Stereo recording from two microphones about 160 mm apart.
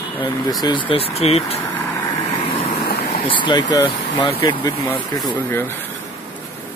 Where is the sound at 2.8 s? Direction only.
90° left.